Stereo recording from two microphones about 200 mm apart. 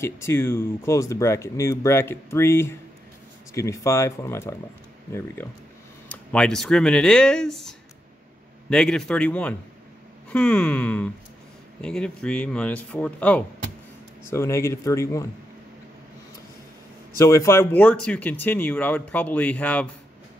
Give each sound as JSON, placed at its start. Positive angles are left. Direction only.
{"t": 0.0, "sound": "speech", "side_deg": 15}
{"t": 17.2, "sound": "speech", "side_deg": 15}